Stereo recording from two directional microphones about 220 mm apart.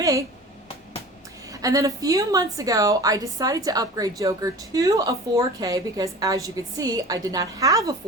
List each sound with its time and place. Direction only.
0.0 s a woman's voice: 15° right (ahead or behind)
1.6 s a woman's voice: 15° right (ahead or behind)